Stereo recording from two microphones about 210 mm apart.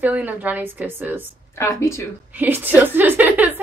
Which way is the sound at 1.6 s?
15° left (ahead or behind).